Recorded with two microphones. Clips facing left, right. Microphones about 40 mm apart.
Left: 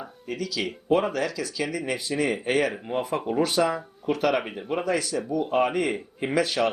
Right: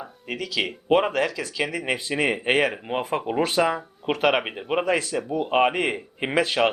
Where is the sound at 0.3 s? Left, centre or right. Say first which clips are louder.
Right 2 dB; right.